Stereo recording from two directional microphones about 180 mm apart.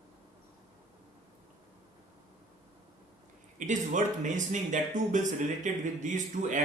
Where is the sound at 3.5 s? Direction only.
45° right (ahead or behind).